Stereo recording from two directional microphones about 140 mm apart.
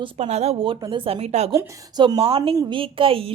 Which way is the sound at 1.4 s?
50° right (ahead or behind).